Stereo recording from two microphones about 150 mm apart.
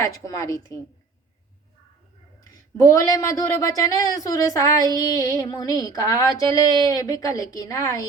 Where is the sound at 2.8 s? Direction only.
20° left (ahead or behind).